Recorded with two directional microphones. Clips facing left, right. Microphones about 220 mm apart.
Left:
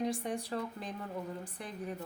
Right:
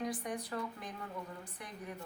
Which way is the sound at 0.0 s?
25° left (ahead or behind).